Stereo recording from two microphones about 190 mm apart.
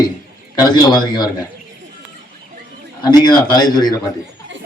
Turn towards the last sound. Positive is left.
turn(degrees=20)  # may be behind; listen again after turning